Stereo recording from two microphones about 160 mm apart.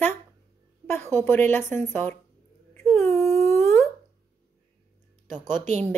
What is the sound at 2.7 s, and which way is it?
Wail, 15° left (ahead or behind).